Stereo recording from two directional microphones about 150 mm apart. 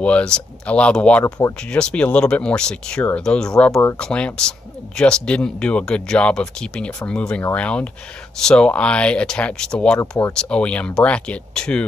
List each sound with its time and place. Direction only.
0.0 s speech: 5° left (ahead or behind)
9.9 s speech: 25° left (ahead or behind)
10.3 s speech: 5° left (ahead or behind)